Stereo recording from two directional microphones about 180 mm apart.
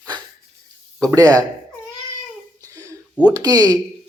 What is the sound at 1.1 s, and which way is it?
Speech, 20° right (ahead or behind).